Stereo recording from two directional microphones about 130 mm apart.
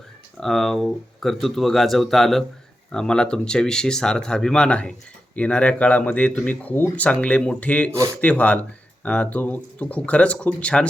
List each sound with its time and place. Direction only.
0.3 s speech: centre (ahead or behind)
7.9 s a man's voice: 20° right (ahead or behind)
8.2 s speech: 10° left (ahead or behind)